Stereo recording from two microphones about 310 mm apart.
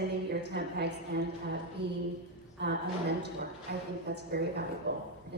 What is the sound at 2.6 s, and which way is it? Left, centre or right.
A woman's voice, right.